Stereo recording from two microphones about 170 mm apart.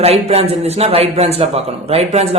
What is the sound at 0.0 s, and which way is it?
A man's voice, 40° right (ahead or behind).